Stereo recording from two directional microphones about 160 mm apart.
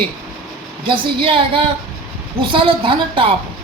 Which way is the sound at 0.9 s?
35° right (ahead or behind).